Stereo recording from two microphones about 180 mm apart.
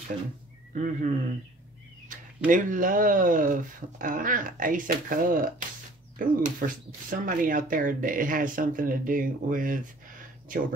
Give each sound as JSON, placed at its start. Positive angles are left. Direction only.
{"t": 0.7, "sound": "speech", "side_deg": -45}